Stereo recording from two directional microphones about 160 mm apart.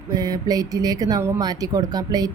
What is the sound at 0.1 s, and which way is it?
Speech, 25° right (ahead or behind).